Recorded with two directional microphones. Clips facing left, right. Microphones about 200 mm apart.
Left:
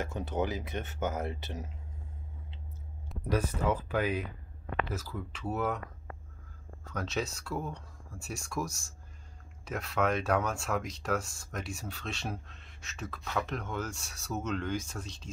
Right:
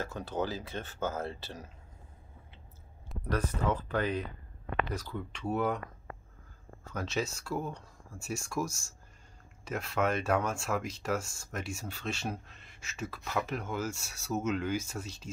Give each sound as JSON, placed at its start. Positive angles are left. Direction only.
{"t": 0.0, "sound": "speech", "side_deg": 20}
{"t": 3.1, "sound": "speech", "side_deg": 10}
{"t": 6.8, "sound": "speech", "side_deg": 0}